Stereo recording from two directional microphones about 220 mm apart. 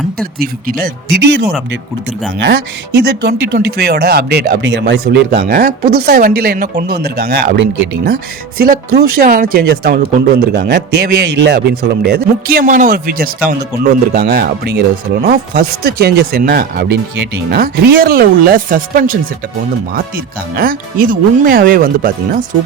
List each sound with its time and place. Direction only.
0.2 s speech: 40° right (ahead or behind)
2.4 s speech: 50° right (ahead or behind)